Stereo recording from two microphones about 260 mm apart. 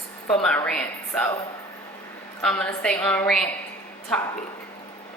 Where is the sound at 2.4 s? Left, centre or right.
Centre.